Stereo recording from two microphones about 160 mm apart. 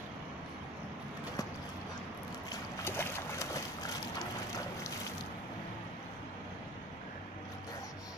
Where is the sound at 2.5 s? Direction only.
15° left (ahead or behind).